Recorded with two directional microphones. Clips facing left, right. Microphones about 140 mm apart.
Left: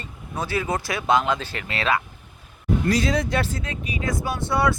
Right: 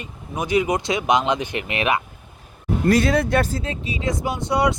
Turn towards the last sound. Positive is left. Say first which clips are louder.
# right 2 dB
turn(degrees=-20)  # may be behind; listen again after turning